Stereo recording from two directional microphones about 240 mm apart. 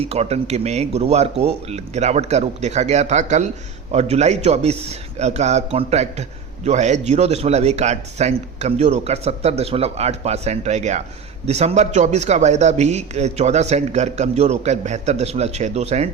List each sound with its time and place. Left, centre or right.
0.0 s a man's voice: right